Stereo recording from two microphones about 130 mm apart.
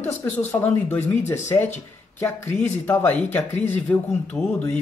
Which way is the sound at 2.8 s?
15° left (ahead or behind).